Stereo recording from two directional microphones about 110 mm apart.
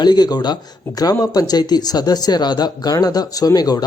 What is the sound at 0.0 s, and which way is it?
Speech, 40° left (ahead or behind).